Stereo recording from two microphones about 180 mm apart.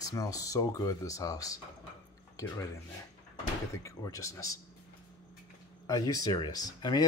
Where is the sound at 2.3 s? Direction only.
20° left (ahead or behind).